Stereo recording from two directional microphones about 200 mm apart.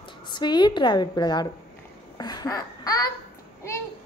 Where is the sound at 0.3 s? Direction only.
20° left (ahead or behind).